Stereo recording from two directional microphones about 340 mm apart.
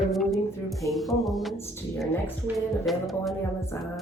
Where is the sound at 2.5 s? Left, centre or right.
Centre.